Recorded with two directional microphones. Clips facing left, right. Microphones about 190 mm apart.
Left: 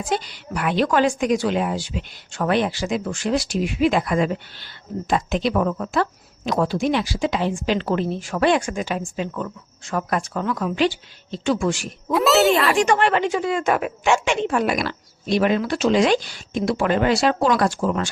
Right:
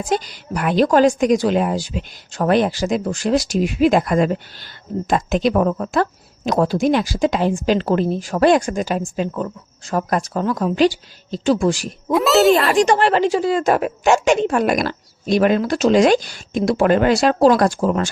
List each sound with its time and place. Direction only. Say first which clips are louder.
0.1 s a woman's voice: right 4 dB; 40° right (ahead or behind)
12.1 s a child's voice: right 3 dB; centre (ahead or behind)
12.7 s a woman's voice: right 3 dB; 35° right (ahead or behind)